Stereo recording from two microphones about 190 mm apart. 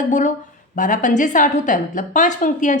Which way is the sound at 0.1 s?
40° left (ahead or behind).